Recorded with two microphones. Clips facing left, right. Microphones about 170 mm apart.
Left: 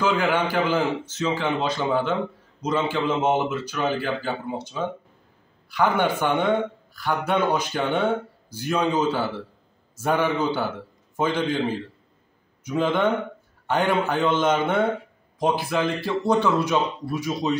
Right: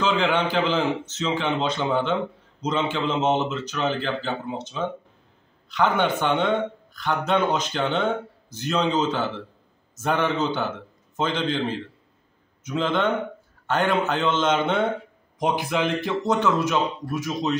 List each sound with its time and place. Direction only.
0.3 s speech: 10° left (ahead or behind)
12.6 s speech: 10° left (ahead or behind)
15.3 s speech: 20° right (ahead or behind)
16.3 s speech: 15° left (ahead or behind)